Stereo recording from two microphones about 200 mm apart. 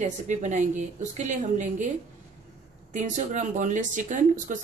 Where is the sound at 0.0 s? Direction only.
35° right (ahead or behind).